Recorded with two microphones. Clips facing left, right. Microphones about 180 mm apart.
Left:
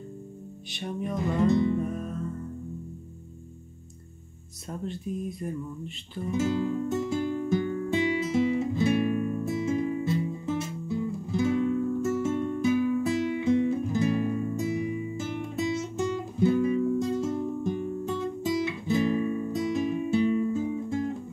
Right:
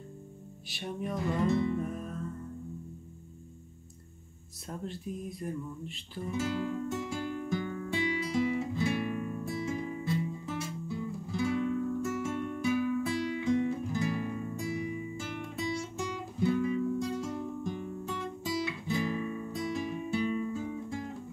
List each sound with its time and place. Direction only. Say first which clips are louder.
0.7 s speech: left 3 dB; centre (ahead or behind)
1.5 s music: left 6 dB; 20° left (ahead or behind)
1.9 s music: left 5 dB; centre (ahead or behind)
4.6 s speech: left 5 dB; centre (ahead or behind)
6.3 s music: left 6 dB; 20° left (ahead or behind)